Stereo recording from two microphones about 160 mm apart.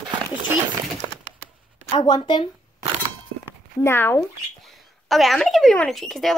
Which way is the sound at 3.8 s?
15° left (ahead or behind).